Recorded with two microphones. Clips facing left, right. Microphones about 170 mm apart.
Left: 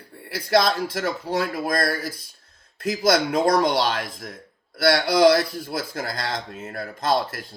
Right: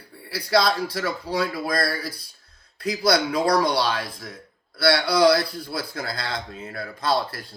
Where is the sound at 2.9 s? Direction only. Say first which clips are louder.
Left 1 dB; 45° left (ahead or behind).